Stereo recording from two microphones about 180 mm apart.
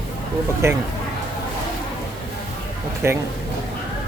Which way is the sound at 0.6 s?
15° right (ahead or behind).